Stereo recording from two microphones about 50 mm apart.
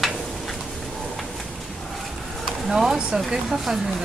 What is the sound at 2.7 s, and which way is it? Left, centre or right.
Speech, centre.